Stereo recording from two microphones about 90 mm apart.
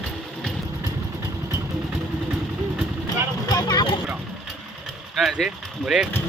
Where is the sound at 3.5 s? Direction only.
50° left (ahead or behind).